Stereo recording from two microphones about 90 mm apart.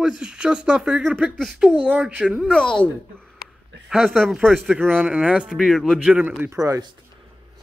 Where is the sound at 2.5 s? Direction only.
5° left (ahead or behind).